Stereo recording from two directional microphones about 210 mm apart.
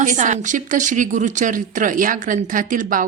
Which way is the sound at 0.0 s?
35° right (ahead or behind).